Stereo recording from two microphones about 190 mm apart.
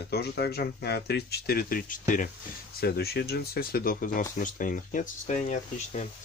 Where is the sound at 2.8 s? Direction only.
55° left (ahead or behind); by 6.1 s 40° left (ahead or behind).